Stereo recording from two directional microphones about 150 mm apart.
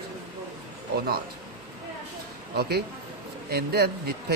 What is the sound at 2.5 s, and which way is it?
Speech, 90° right.